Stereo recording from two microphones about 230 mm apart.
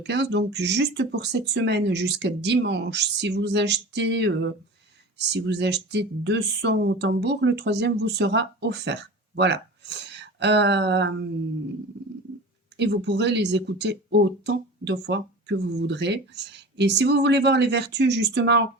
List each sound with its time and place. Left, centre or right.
0.1 s speech: right
12.7 s speech: right